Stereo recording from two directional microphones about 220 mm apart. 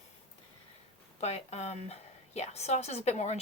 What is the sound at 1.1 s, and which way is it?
A woman's voice, 30° left (ahead or behind).